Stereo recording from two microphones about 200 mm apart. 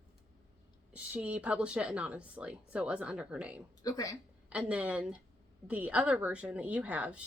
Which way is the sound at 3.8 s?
15° left (ahead or behind).